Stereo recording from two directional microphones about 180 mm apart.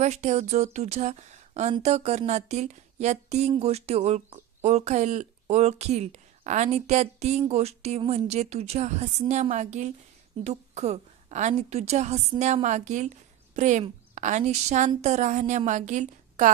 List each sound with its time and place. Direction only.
0.0 s speech: 40° right (ahead or behind)